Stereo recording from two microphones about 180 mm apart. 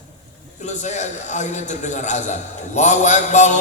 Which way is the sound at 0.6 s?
40° left (ahead or behind).